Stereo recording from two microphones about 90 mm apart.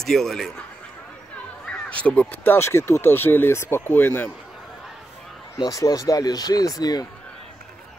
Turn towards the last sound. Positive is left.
turn(degrees=45)  # may be behind; listen again after turning